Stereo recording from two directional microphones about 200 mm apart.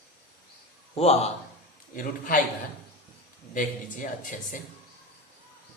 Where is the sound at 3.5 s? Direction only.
40° left (ahead or behind).